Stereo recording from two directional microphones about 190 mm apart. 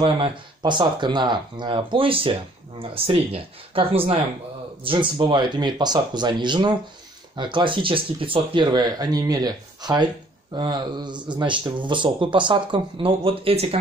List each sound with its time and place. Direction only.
0.0 s speech: 25° right (ahead or behind)